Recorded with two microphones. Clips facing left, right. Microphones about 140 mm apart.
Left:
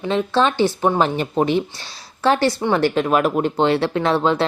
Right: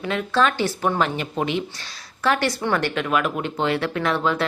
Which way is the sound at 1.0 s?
35° left (ahead or behind).